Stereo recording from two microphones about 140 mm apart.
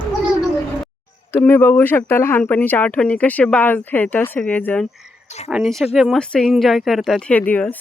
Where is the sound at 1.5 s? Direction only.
15° left (ahead or behind).